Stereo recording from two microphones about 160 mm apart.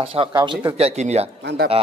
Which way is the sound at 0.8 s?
40° right (ahead or behind).